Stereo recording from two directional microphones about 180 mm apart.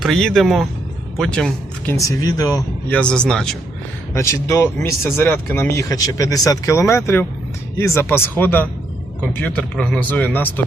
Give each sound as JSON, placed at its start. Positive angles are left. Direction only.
{"t": 0.0, "sound": "speech", "side_deg": 0}
{"t": 2.0, "sound": "speech", "side_deg": 20}
{"t": 2.9, "sound": "speech", "side_deg": 5}
{"t": 4.1, "sound": "speech", "side_deg": 15}